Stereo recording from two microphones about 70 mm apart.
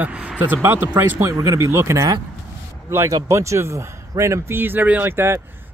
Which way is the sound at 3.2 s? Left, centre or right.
Right.